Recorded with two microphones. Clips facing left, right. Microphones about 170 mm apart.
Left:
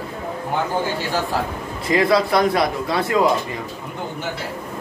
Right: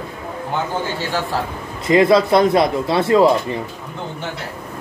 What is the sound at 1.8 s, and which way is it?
Speech, 20° right (ahead or behind).